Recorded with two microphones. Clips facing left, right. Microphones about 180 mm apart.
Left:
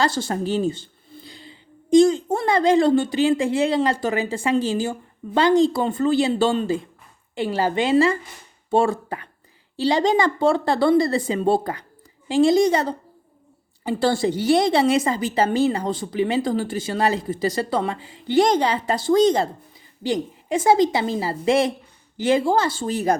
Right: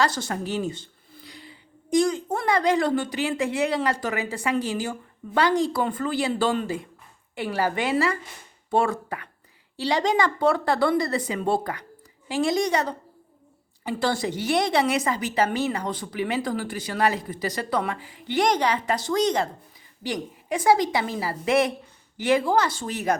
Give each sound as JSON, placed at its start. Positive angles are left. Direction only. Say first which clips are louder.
{"t": 0.0, "sound": "speech", "louder": "left 3 dB", "side_deg": 30}